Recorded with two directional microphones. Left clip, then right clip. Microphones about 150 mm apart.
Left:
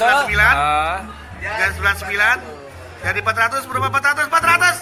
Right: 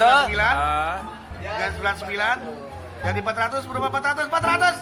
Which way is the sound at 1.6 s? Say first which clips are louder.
Left 7 dB; 20° right (ahead or behind).